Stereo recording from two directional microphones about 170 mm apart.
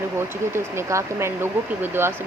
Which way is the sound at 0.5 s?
15° right (ahead or behind).